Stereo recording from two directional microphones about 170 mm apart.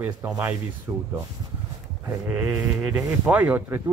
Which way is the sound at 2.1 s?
10° right (ahead or behind).